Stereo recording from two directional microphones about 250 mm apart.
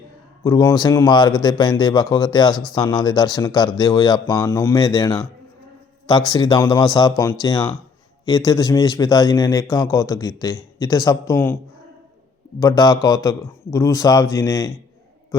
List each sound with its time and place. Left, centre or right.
0.4 s a man's voice: centre
12.5 s a man's voice: centre